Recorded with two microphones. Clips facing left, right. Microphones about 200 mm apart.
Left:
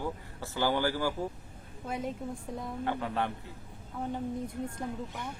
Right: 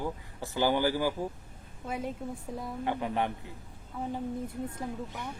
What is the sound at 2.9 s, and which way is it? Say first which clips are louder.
Speech: right 2 dB; 15° right (ahead or behind).